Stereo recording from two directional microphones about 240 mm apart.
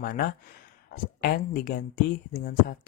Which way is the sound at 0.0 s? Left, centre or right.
Left.